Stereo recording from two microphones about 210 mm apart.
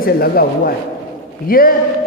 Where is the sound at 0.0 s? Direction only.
45° left (ahead or behind).